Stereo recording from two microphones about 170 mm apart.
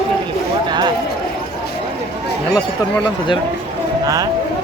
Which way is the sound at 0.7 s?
25° right (ahead or behind).